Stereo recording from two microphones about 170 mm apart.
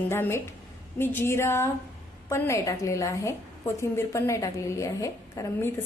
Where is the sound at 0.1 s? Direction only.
15° left (ahead or behind).